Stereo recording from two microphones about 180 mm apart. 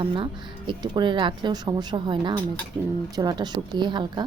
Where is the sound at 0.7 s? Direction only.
25° right (ahead or behind).